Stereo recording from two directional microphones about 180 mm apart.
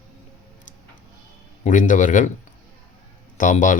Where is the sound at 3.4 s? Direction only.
45° left (ahead or behind).